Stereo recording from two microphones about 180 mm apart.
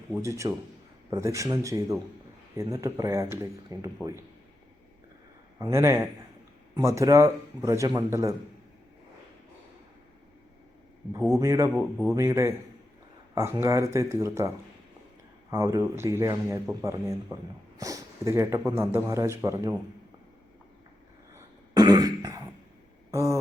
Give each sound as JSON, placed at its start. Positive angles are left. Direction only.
{"t": 0.2, "sound": "a man's voice", "side_deg": -15}
{"t": 5.5, "sound": "a man's voice", "side_deg": -15}
{"t": 11.3, "sound": "a man's voice", "side_deg": -15}
{"t": 11.7, "sound": "a man's voice", "side_deg": 0}
{"t": 12.1, "sound": "a man's voice", "side_deg": -15}
{"t": 21.3, "sound": "throat clearing", "side_deg": -20}
{"t": 23.1, "sound": "a man's voice", "side_deg": -15}